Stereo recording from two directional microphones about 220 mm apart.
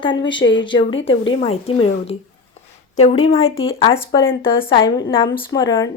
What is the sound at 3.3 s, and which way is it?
A woman's voice, 25° left (ahead or behind).